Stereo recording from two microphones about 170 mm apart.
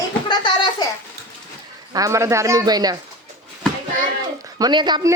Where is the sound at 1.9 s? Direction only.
20° right (ahead or behind).